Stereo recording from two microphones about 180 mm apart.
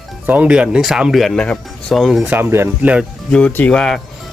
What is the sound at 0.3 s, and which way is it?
Speech, 5° right (ahead or behind).